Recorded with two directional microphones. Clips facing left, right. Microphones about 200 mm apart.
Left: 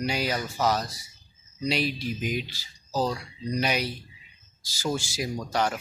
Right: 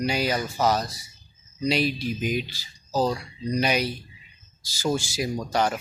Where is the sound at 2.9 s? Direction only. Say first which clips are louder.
Right 3 dB; 30° right (ahead or behind).